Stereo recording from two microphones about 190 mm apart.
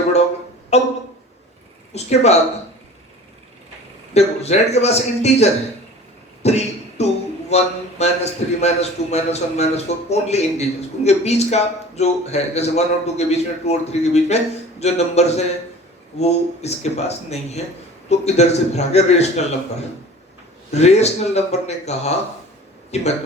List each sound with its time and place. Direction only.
0.7 s a man's voice: 35° left (ahead or behind)
1.9 s a man's voice: 35° left (ahead or behind)
4.1 s a man's voice: 35° left (ahead or behind)
6.4 s cough: 35° left (ahead or behind)
7.5 s a man's voice: 35° left (ahead or behind)
20.7 s a man's voice: 35° left (ahead or behind)